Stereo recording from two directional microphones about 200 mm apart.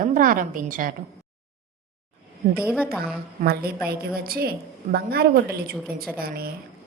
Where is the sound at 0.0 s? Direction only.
40° right (ahead or behind).